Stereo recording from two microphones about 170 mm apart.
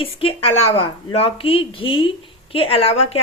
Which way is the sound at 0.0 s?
35° left (ahead or behind).